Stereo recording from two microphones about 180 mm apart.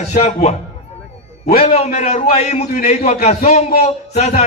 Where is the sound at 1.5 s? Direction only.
35° left (ahead or behind).